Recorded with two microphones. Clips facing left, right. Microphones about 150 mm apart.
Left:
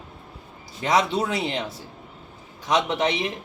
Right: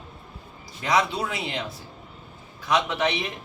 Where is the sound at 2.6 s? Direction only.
25° left (ahead or behind).